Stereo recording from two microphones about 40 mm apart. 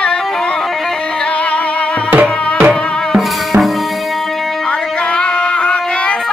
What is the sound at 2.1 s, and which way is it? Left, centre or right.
Music, right.